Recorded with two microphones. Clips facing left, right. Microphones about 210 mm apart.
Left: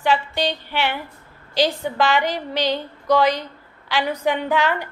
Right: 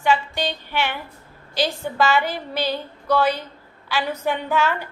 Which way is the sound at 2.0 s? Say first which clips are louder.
Even; 15° left (ahead or behind).